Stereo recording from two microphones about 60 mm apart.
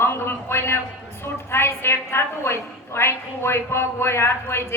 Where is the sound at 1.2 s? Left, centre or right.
Left.